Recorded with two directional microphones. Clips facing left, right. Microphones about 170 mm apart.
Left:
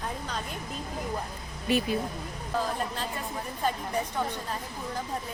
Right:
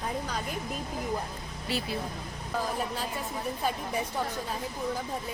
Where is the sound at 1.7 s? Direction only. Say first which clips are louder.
Left 7 dB; 15° left (ahead or behind).